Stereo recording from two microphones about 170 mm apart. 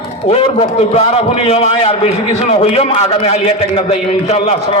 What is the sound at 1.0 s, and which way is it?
A man's voice, 35° left (ahead or behind).